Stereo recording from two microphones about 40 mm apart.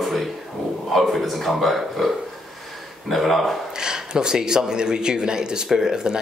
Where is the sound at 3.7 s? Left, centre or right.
Centre.